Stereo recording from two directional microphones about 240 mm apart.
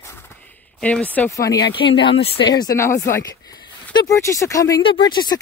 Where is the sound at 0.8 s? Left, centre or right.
Centre.